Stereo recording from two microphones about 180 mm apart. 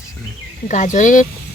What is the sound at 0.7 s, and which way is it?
Speech, 45° left (ahead or behind).